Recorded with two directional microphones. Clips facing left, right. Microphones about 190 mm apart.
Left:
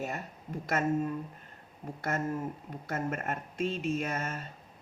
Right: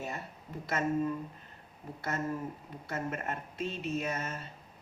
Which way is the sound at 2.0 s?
50° left (ahead or behind).